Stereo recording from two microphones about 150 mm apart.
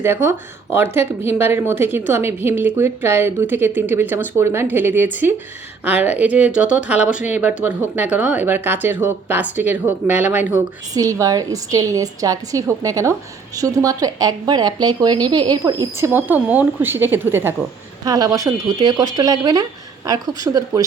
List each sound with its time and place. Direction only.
0.0 s speech: 15° right (ahead or behind)
10.9 s a woman's voice: 20° right (ahead or behind)